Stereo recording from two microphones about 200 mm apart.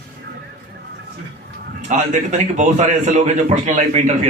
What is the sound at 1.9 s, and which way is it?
A man's voice, 35° right (ahead or behind).